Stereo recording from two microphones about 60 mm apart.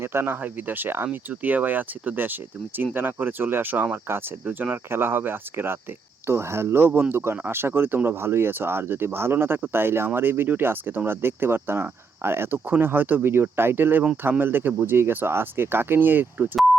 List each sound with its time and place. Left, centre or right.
0.0 s speech: right
0.4 s speech: right
4.4 s speech: right
4.9 s speech: right